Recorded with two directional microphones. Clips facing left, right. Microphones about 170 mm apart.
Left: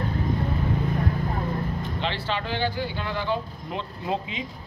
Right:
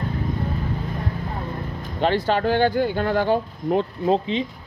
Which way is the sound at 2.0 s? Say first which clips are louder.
Right 12 dB; 45° right (ahead or behind).